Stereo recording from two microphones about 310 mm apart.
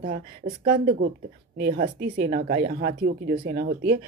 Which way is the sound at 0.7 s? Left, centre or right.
Right.